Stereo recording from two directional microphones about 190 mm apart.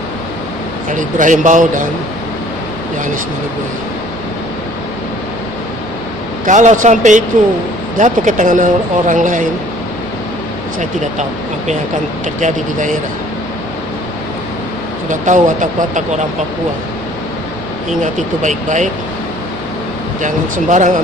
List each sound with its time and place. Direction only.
0.9 s speech: 40° right (ahead or behind)
6.4 s speech: 40° right (ahead or behind)
12.4 s speech: 40° right (ahead or behind)
15.1 s speech: 40° right (ahead or behind)
18.0 s speech: 40° right (ahead or behind)
20.2 s speech: 40° right (ahead or behind)